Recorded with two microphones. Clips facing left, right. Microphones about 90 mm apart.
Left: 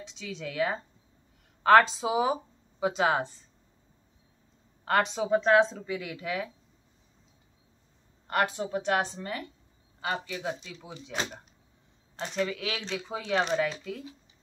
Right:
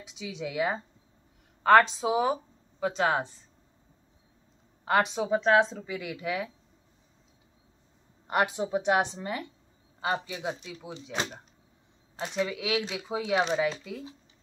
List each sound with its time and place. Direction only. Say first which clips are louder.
0.0 s speech: right 2 dB; 10° right (ahead or behind)
1.6 s speech: even; centre (ahead or behind)
2.3 s a sound: left 1 dB; 10° left (ahead or behind)
4.8 s speech: right 1 dB; 5° right (ahead or behind)
8.3 s speech: right 1 dB; 15° right (ahead or behind)
12.2 s speech: even; 5° right (ahead or behind)